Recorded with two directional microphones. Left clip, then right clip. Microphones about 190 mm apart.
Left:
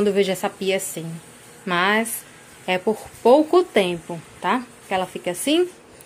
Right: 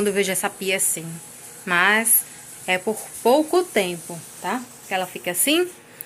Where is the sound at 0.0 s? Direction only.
15° left (ahead or behind).